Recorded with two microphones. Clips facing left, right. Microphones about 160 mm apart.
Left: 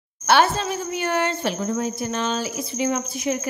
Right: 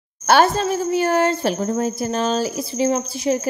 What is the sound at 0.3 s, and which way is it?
Speech, 40° right (ahead or behind).